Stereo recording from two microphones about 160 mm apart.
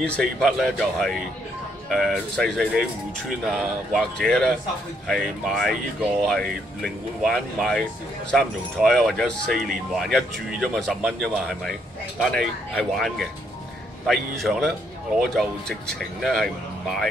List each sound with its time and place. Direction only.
0.1 s speech: centre (ahead or behind)